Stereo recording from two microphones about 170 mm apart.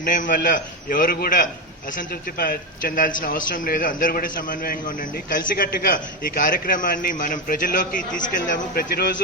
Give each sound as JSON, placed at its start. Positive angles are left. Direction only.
{"t": 0.0, "sound": "a man's voice", "side_deg": 50}